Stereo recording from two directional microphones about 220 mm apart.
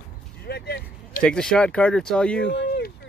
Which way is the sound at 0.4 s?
45° left (ahead or behind).